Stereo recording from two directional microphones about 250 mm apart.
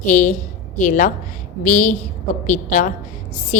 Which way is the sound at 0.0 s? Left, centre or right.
Left.